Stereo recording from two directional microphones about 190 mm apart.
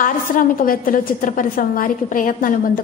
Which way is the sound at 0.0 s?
45° left (ahead or behind).